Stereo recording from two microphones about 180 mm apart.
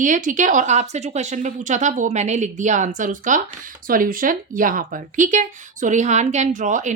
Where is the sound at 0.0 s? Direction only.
45° right (ahead or behind).